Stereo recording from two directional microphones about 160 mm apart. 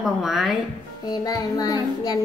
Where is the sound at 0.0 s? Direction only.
Centre (ahead or behind).